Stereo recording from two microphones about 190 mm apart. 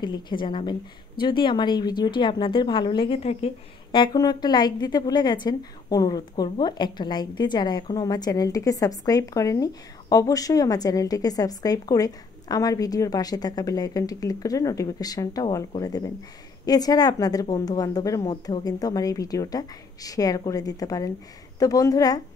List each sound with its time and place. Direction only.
0.0 s a woman's voice: 25° left (ahead or behind)